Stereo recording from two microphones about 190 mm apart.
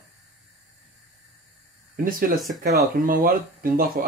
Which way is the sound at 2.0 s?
50° right (ahead or behind).